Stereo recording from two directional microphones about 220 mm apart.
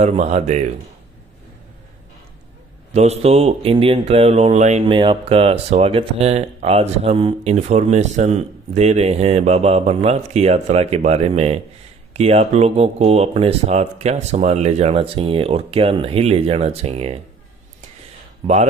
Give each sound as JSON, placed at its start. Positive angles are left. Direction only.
{"t": 0.0, "sound": "speech", "side_deg": -30}
{"t": 2.9, "sound": "speech", "side_deg": -30}